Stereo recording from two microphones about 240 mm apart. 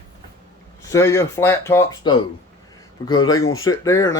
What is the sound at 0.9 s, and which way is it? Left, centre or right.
Speech, centre.